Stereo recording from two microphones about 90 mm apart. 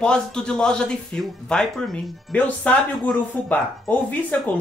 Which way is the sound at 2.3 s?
20° left (ahead or behind).